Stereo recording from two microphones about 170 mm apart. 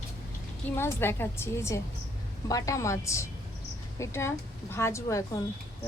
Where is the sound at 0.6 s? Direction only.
15° left (ahead or behind).